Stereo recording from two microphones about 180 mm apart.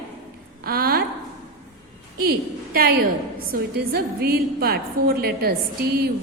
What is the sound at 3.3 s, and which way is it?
A woman's voice, 55° right (ahead or behind).